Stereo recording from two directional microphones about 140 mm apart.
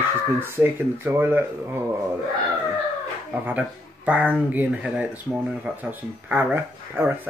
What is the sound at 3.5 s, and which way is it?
Speech, 10° right (ahead or behind).